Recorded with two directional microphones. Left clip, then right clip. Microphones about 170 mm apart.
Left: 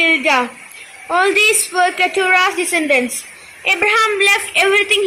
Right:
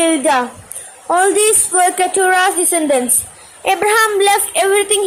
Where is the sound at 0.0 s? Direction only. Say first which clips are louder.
Even; 30° right (ahead or behind).